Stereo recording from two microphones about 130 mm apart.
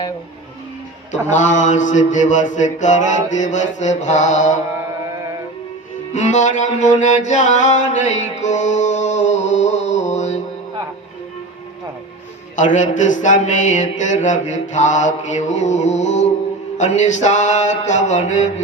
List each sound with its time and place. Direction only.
1.3 s mantra: 70° left (ahead or behind)
6.1 s music: 70° left (ahead or behind)
12.5 s mantra: 70° left (ahead or behind)
16.7 s a sound: 65° left (ahead or behind)